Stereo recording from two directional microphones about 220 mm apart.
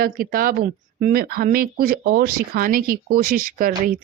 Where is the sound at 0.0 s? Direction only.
40° right (ahead or behind).